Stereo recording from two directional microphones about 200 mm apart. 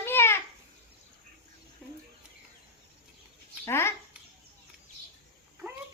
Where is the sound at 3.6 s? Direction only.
10° left (ahead or behind).